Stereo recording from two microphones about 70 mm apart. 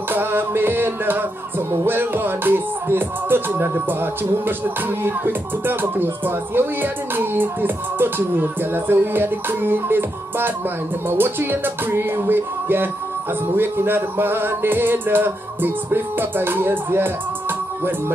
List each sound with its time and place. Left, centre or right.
0.1 s music: right